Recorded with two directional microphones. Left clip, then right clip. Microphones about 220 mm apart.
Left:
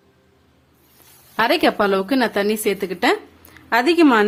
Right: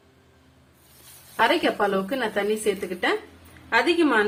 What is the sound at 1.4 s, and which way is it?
A woman's voice, 55° left (ahead or behind).